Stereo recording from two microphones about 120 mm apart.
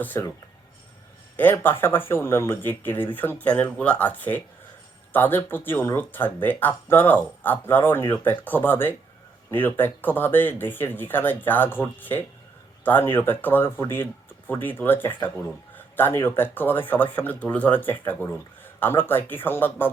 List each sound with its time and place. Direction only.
0.0 s speech: 15° left (ahead or behind)
1.4 s speech: 15° left (ahead or behind)